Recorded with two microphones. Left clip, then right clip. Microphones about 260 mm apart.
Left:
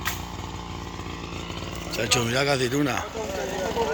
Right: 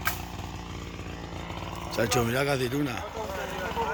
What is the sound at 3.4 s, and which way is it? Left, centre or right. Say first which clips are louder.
Vehicle: left 5 dB; left.